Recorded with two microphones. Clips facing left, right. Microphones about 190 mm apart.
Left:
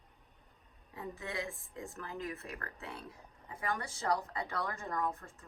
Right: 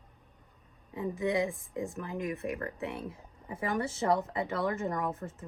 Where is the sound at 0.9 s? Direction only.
15° right (ahead or behind).